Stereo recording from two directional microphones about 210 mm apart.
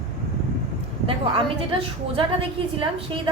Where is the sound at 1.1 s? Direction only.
25° right (ahead or behind).